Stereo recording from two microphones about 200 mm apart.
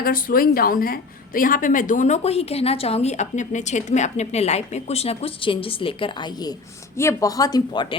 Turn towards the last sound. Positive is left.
turn(degrees=20)  # may be behind; listen again after turning